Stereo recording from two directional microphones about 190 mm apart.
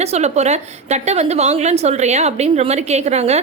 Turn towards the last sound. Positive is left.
turn(degrees=-35)  # may be behind; listen again after turning